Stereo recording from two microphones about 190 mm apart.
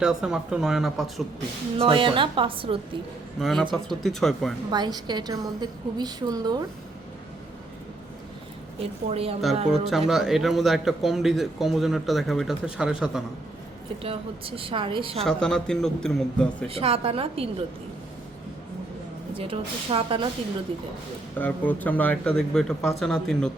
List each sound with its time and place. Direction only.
0.0 s a man's voice: 5° right (ahead or behind)
1.8 s a woman's voice: 25° right (ahead or behind)
3.4 s a man's voice: centre (ahead or behind)
4.7 s a woman's voice: 20° right (ahead or behind)
8.8 s a woman's voice: 30° right (ahead or behind)
10.1 s a man's voice: centre (ahead or behind)
14.0 s a woman's voice: 30° right (ahead or behind)
15.2 s a man's voice: 5° left (ahead or behind)
16.6 s a woman's voice: 30° right (ahead or behind)
19.4 s a woman's voice: 30° right (ahead or behind)
21.3 s a man's voice: 10° left (ahead or behind)